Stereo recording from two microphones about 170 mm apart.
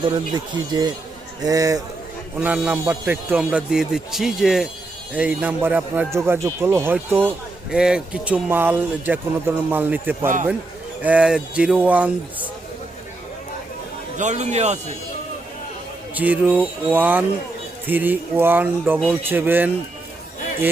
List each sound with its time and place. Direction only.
0.0 s speech: 25° right (ahead or behind)
2.4 s a man's voice: 10° right (ahead or behind)
14.2 s a man's voice: 45° right (ahead or behind)
16.1 s a man's voice: 10° right (ahead or behind)